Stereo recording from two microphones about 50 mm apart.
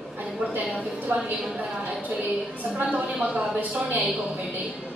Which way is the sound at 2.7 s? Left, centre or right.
Right.